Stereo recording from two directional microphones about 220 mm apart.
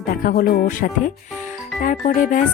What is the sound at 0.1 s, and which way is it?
Speech, 40° left (ahead or behind).